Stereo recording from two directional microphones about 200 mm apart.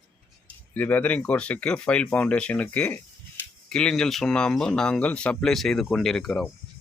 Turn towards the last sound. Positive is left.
turn(degrees=5)  # may be behind; listen again after turning